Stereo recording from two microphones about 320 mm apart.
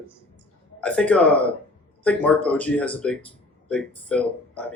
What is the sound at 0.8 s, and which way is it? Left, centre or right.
Speech, centre.